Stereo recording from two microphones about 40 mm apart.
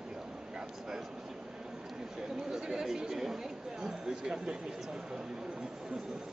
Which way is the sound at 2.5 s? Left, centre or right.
Centre.